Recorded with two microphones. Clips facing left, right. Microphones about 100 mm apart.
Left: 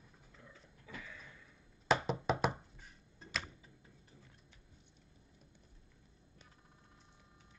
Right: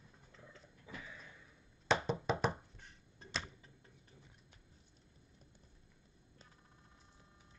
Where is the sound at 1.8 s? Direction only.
5° left (ahead or behind).